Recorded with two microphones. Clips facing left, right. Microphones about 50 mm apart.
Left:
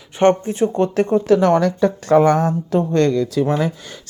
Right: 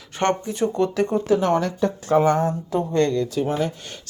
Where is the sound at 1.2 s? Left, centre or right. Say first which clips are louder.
Left 6 dB; left.